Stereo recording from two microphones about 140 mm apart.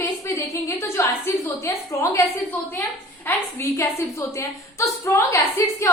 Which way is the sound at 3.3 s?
15° left (ahead or behind).